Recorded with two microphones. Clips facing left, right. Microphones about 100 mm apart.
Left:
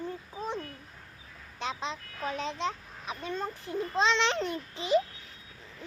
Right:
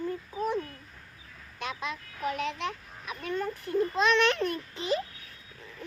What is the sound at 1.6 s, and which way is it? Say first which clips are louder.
Speech: left 1 dB; 25° left (ahead or behind).